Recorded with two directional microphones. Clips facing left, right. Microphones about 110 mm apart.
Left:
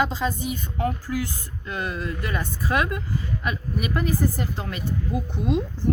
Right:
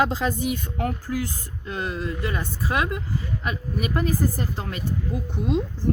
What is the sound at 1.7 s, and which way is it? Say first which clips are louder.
Speech: right 1 dB; 30° right (ahead or behind).